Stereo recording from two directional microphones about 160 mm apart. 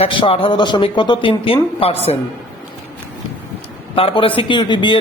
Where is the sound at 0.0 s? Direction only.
35° left (ahead or behind).